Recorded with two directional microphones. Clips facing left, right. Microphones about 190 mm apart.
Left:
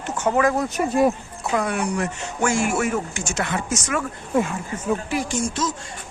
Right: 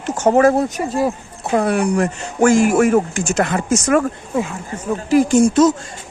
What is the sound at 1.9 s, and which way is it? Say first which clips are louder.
Speech: right 7 dB; 50° right (ahead or behind).